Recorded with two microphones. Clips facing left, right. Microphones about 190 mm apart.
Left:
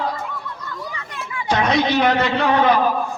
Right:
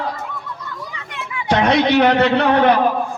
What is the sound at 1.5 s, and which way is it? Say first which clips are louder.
A man's voice: right 3 dB; 65° right (ahead or behind).